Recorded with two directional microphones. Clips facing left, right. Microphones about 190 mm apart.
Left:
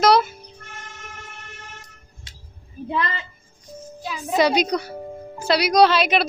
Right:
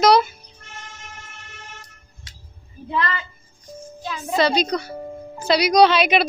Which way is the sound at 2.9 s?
20° left (ahead or behind).